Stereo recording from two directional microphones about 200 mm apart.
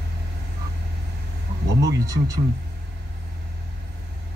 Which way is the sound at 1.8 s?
15° right (ahead or behind).